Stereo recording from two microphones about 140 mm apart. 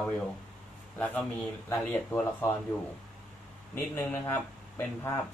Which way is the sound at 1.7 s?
15° left (ahead or behind).